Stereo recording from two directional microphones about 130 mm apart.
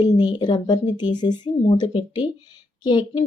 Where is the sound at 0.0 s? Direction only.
35° left (ahead or behind).